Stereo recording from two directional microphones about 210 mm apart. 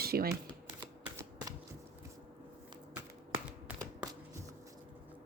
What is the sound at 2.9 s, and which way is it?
Typing, 10° right (ahead or behind).